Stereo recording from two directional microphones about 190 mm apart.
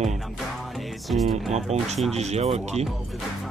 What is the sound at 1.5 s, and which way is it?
Speech, 35° right (ahead or behind).